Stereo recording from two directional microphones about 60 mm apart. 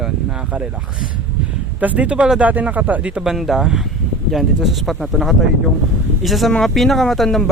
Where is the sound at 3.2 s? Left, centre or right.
Centre.